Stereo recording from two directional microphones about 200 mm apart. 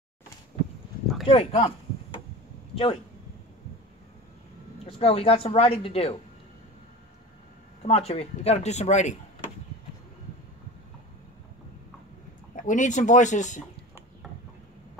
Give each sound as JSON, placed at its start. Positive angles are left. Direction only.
{"t": 1.2, "sound": "speech", "side_deg": 30}
{"t": 2.7, "sound": "speech", "side_deg": 25}
{"t": 4.8, "sound": "speech", "side_deg": 30}
{"t": 7.8, "sound": "speech", "side_deg": 30}
{"t": 12.5, "sound": "speech", "side_deg": 40}